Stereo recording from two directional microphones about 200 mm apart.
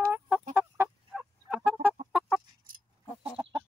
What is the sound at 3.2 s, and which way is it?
Chicken, 25° right (ahead or behind).